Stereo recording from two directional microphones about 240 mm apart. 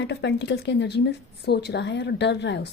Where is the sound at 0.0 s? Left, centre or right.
Left.